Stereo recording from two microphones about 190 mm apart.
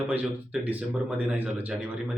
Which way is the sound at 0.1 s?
10° right (ahead or behind).